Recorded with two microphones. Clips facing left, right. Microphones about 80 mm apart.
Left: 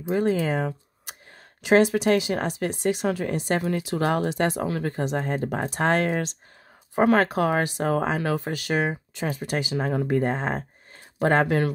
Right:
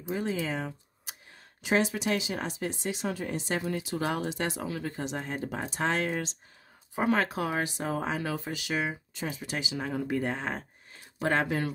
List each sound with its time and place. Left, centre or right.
0.1 s speech: left
1.6 s speech: left
11.4 s speech: left